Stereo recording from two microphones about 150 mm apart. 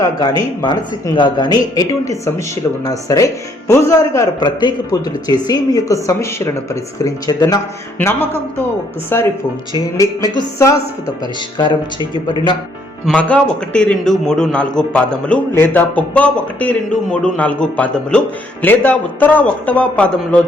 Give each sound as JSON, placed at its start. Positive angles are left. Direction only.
{"t": 0.0, "sound": "speech", "side_deg": 25}
{"t": 4.4, "sound": "speech", "side_deg": 30}
{"t": 7.9, "sound": "a man's voice", "side_deg": 15}
{"t": 11.5, "sound": "speech", "side_deg": 35}
{"t": 13.1, "sound": "a man's voice", "side_deg": 10}